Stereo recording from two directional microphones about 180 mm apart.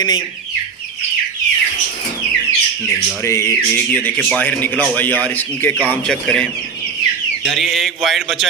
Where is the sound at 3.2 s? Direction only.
15° left (ahead or behind).